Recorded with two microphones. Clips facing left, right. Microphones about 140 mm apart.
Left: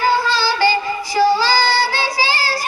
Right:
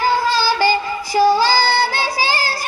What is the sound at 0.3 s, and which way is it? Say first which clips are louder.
Music: even; 45° right (ahead or behind).